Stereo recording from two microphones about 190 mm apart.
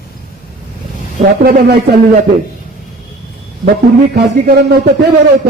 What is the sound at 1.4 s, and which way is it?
Speech, 55° right (ahead or behind).